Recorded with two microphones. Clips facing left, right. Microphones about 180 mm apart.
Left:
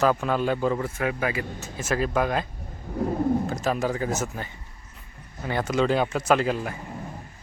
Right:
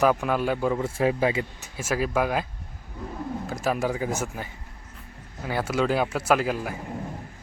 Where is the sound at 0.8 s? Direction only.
30° right (ahead or behind).